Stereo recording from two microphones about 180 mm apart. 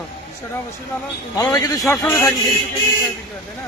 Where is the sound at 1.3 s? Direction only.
20° left (ahead or behind).